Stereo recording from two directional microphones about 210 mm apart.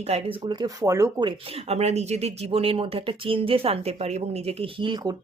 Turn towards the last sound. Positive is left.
turn(degrees=-20)  # may be behind; listen again after turning